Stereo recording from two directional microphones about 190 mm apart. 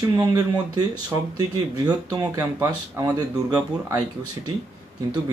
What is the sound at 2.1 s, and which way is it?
Speech, 20° right (ahead or behind).